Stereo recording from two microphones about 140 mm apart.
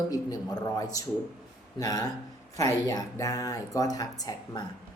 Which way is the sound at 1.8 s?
25° left (ahead or behind).